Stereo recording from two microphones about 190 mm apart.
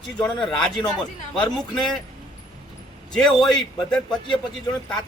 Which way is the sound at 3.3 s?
Centre (ahead or behind).